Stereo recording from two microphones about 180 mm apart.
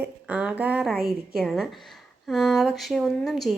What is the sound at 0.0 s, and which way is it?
A woman's voice, 5° right (ahead or behind).